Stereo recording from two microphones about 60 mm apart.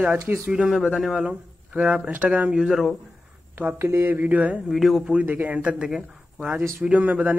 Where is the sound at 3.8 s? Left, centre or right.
Right.